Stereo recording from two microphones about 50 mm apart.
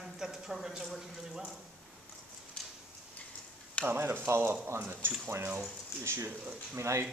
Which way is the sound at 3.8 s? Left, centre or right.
Right.